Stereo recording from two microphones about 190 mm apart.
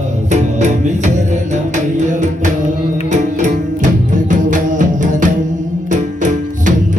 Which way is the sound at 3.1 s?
40° right (ahead or behind).